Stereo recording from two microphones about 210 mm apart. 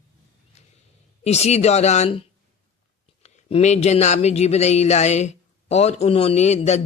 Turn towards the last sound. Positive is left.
turn(degrees=30)  # may be behind; listen again after turning